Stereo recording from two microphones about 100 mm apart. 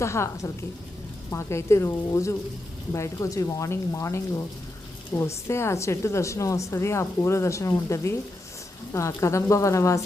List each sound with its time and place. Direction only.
0.0 s a woman's voice: 30° left (ahead or behind)